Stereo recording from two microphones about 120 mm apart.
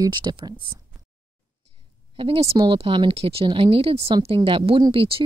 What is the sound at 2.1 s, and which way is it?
A woman's voice, 50° right (ahead or behind).